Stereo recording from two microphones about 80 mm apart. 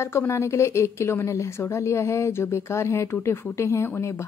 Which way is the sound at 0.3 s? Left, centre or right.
Left.